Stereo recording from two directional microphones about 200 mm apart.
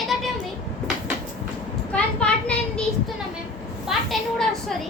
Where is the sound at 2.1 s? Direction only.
5° left (ahead or behind).